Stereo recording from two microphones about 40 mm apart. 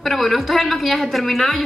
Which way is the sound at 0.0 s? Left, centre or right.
Centre.